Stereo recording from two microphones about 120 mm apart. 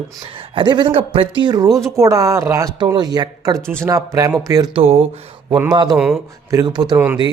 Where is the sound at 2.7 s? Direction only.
40° right (ahead or behind).